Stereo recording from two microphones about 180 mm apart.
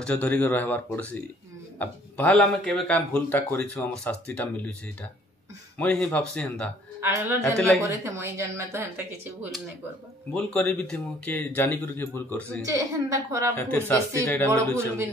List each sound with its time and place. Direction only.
0.0 s speech: 5° left (ahead or behind)
5.8 s speech: 5° left (ahead or behind)
7.0 s a woman's voice: 15° right (ahead or behind)
10.3 s speech: 5° left (ahead or behind)
12.6 s speech: 15° right (ahead or behind)
13.6 s speech: 10° left (ahead or behind)